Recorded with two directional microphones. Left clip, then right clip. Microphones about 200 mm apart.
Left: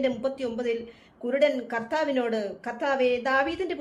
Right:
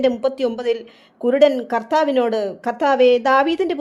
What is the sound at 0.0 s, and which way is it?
Speech, 40° right (ahead or behind).